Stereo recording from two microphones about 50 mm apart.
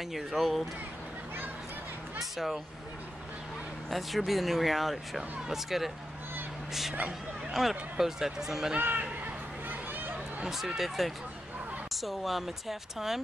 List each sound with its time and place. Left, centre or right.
0.1 s speech: centre
2.3 s speech: centre
3.9 s speech: centre
8.7 s speech: right
9.2 s a sound: right
10.4 s speech: centre